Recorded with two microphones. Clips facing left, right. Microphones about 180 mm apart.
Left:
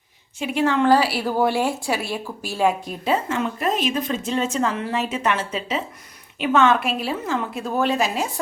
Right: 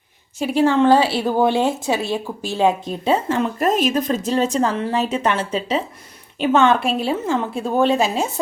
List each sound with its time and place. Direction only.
0.3 s a woman's voice: 35° right (ahead or behind)